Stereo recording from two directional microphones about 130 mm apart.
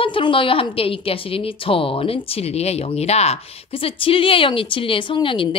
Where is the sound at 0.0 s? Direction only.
40° left (ahead or behind).